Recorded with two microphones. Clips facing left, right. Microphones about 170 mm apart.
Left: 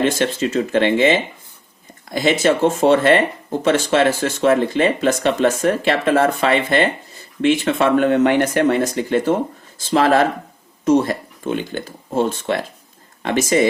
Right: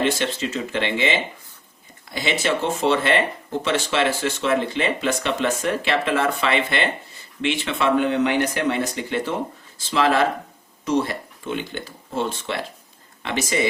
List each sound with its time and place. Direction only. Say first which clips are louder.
0.0 s speech: left 4 dB; 45° left (ahead or behind)